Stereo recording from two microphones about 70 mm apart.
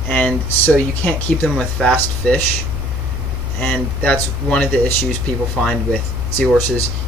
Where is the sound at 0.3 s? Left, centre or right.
Centre.